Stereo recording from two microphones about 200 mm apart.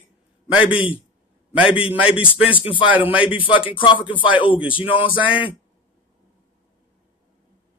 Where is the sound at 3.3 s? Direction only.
25° left (ahead or behind).